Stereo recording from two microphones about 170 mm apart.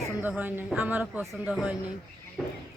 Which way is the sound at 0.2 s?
10° right (ahead or behind).